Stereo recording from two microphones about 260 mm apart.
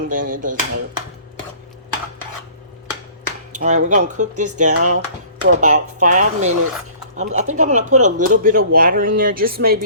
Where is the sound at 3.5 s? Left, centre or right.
Right.